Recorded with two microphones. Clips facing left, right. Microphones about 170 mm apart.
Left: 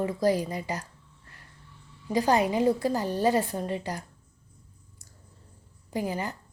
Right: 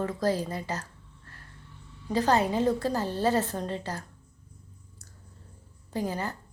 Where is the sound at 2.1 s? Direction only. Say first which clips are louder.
Left 1 dB; 15° left (ahead or behind).